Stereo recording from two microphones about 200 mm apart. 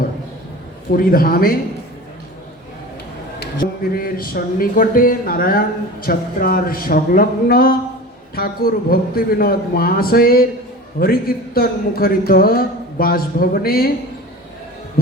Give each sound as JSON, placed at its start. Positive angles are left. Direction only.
{"t": 0.9, "sound": "speech", "side_deg": 45}
{"t": 3.4, "sound": "speech", "side_deg": 45}